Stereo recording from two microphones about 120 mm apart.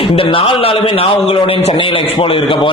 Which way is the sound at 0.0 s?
50° left (ahead or behind).